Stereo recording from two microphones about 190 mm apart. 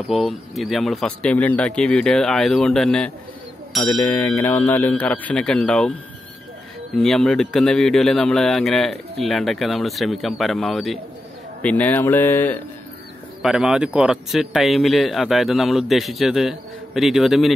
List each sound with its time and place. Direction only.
0.1 s speech: centre (ahead or behind)
3.8 s speech: 20° left (ahead or behind)
7.0 s speech: centre (ahead or behind)
13.4 s speech: 5° right (ahead or behind)